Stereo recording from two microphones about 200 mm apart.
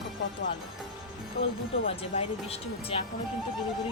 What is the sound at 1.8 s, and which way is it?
Speech, 30° left (ahead or behind).